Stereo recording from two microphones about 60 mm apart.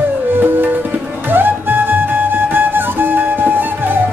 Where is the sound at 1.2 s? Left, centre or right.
Right.